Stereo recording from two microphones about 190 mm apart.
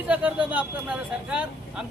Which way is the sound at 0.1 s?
10° right (ahead or behind).